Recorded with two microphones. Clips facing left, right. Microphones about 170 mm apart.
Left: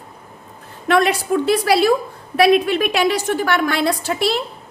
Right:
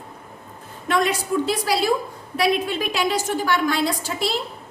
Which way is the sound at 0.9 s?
70° left (ahead or behind).